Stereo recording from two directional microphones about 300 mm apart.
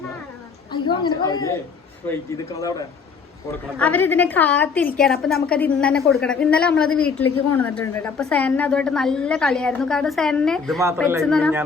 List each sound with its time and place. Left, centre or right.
0.7 s a sound: centre
2.6 s a man's voice: centre
7.3 s a woman's voice: left
7.6 s a woman's voice: centre